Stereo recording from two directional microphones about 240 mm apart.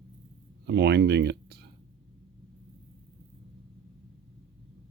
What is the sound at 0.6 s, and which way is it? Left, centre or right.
Speech, right.